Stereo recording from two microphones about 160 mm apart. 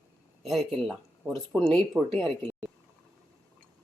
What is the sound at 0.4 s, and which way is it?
Speech, centre (ahead or behind).